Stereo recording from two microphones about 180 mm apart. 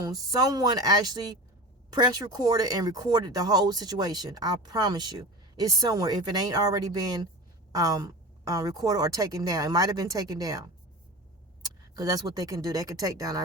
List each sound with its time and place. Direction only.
0.0 s a woman's voice: 20° right (ahead or behind)
11.6 s speech: 20° right (ahead or behind)